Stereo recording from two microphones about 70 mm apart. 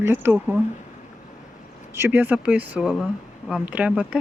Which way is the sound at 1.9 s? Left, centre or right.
Right.